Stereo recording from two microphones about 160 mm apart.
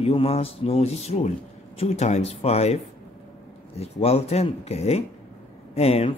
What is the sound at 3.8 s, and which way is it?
Speech, 40° left (ahead or behind).